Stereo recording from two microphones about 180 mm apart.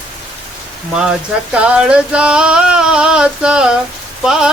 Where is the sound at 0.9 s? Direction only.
5° right (ahead or behind).